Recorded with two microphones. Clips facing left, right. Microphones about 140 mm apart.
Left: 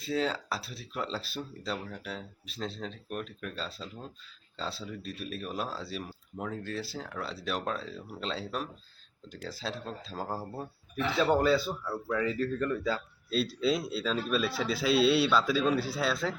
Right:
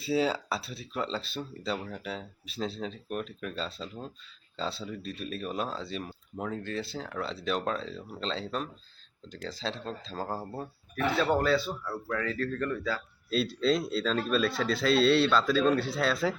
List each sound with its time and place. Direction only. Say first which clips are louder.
0.0 s speech: right 3 dB; 5° right (ahead or behind); by 13.0 s 10° left (ahead or behind)
13.3 s speech: right 2 dB; centre (ahead or behind)